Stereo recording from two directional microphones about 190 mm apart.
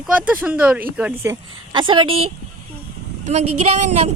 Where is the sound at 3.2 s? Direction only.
35° right (ahead or behind).